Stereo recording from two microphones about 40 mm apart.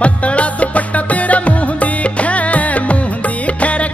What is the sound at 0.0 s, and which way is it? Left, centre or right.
Music, left.